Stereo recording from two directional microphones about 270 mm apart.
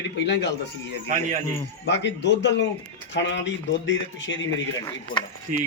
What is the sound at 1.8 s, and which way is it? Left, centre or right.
Speech, left.